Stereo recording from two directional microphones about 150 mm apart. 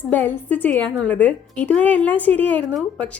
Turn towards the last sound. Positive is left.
turn(degrees=0)  # may be behind; listen again after turning